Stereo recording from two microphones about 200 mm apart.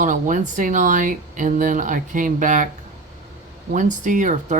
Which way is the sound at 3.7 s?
40° right (ahead or behind).